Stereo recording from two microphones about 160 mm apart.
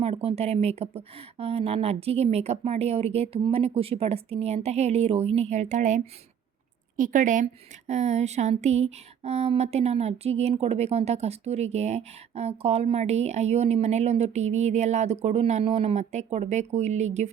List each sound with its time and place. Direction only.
0.0 s speech: 35° right (ahead or behind)